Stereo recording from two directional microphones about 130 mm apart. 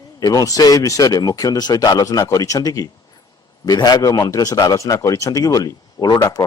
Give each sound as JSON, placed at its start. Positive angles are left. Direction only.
{"t": 0.2, "sound": "speech", "side_deg": 30}